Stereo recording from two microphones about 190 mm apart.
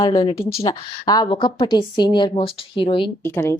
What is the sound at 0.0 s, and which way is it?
Speech, 20° left (ahead or behind).